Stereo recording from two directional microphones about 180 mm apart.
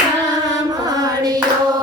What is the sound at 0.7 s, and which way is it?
Hands, 20° right (ahead or behind).